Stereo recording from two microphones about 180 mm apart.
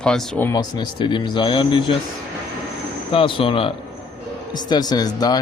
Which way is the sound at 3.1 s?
30° left (ahead or behind).